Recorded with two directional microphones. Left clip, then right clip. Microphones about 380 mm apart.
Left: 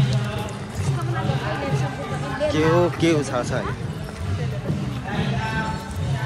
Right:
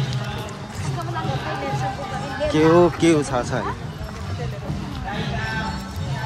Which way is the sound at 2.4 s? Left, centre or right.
Centre.